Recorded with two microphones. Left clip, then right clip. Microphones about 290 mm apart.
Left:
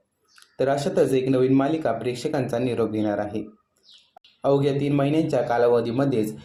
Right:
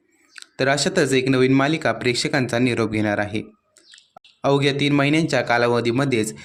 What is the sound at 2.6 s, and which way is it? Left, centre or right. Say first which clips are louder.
Speech: right 3 dB; right.